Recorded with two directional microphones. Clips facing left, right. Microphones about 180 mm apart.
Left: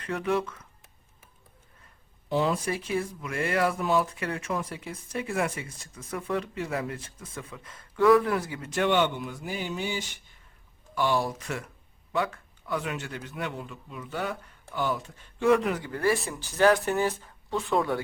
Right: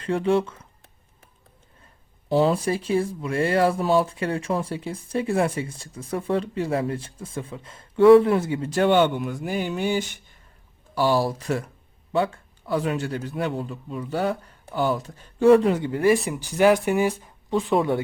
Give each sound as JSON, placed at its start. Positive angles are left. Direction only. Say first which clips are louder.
{"t": 0.0, "sound": "speech", "louder": "right 6 dB", "side_deg": -30}
{"t": 2.3, "sound": "speech", "louder": "right 6 dB", "side_deg": -35}
{"t": 10.9, "sound": "a man's voice", "louder": "right 5 dB", "side_deg": -35}